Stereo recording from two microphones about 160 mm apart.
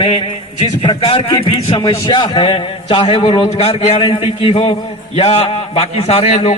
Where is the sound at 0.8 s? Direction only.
35° left (ahead or behind).